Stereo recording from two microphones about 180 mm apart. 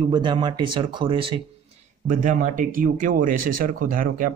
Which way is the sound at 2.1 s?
45° right (ahead or behind).